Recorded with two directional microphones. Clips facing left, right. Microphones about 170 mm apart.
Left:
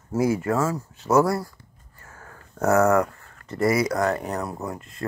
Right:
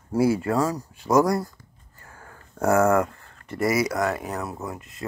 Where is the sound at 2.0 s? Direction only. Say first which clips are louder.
Left 1 dB; 30° right (ahead or behind).